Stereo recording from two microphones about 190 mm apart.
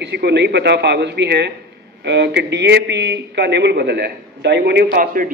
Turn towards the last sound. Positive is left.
turn(degrees=-45)  # may be behind; listen again after turning